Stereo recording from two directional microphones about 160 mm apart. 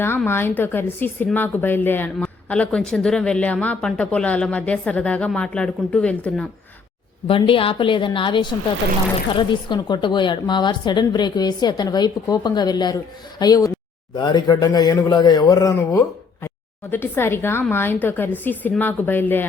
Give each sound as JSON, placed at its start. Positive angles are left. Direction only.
{"t": 0.3, "sound": "speech", "side_deg": 15}
{"t": 7.3, "sound": "a woman's voice", "side_deg": 35}